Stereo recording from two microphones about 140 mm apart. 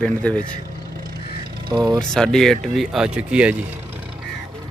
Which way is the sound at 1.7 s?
30° right (ahead or behind).